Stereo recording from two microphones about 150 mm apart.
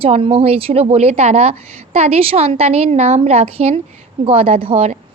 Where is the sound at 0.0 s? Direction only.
40° right (ahead or behind).